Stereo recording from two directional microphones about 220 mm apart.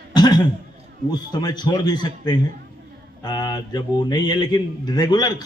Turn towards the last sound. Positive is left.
turn(degrees=20)  # may be behind; listen again after turning